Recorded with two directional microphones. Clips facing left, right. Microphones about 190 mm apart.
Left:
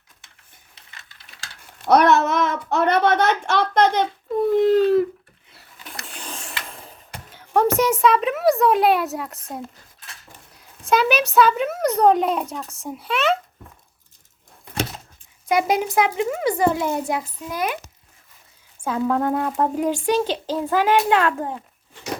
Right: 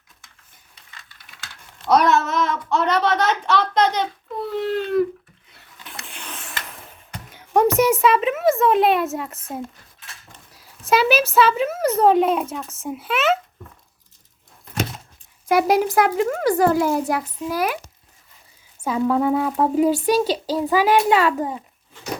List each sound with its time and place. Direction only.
1.8 s a sound: 60° left (ahead or behind); by 4.9 s 40° left (ahead or behind)
6.1 s printer: 35° left (ahead or behind)
7.3 s speech: 15° right (ahead or behind)
10.8 s speech: 5° right (ahead or behind)
15.4 s speech: 5° right (ahead or behind)
18.9 s speech: 5° right (ahead or behind)